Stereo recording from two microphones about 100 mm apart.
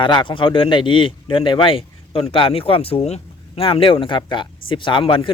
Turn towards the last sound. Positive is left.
turn(degrees=55)  # may be behind; listen again after turning